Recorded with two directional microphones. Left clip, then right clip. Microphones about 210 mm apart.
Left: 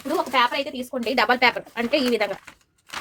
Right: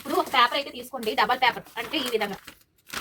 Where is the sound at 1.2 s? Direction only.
60° left (ahead or behind).